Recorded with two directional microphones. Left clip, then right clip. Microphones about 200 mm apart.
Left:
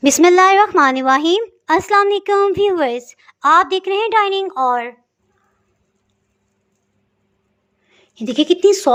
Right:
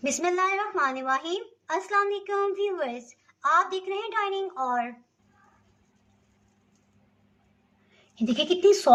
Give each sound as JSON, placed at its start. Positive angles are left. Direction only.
{"t": 0.0, "sound": "a woman's voice", "side_deg": 50}
{"t": 7.9, "sound": "speech", "side_deg": 45}